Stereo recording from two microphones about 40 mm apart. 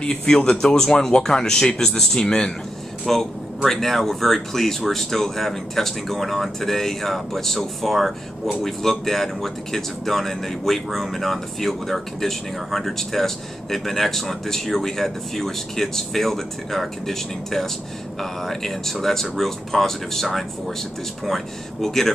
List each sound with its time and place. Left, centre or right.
0.1 s speech: centre
21.8 s speech: centre